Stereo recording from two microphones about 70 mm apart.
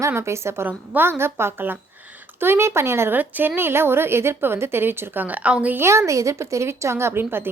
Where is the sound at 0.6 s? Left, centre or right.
Right.